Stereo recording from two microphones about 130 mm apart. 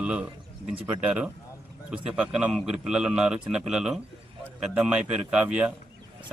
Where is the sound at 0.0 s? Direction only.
10° right (ahead or behind).